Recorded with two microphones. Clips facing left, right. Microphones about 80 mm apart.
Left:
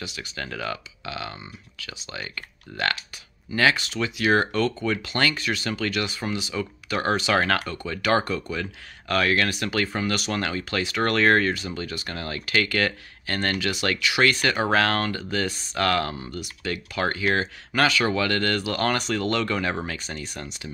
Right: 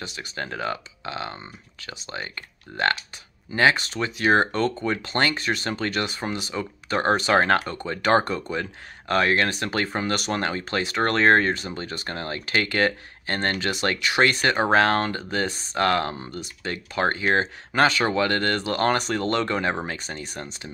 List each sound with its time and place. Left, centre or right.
0.0 s speech: right
3.7 s speech: right